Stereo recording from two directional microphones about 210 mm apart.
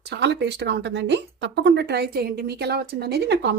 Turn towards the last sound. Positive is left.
turn(degrees=-55)  # may be behind; listen again after turning